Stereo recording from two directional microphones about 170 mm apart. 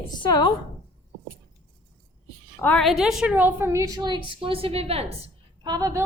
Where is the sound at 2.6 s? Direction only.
5° left (ahead or behind); by 5.0 s 35° right (ahead or behind).